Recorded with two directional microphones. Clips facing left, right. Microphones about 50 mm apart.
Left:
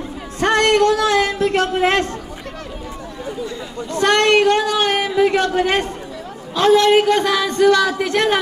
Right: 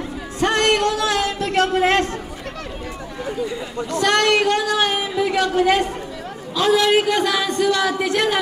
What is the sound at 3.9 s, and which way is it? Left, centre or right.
A woman's voice, left.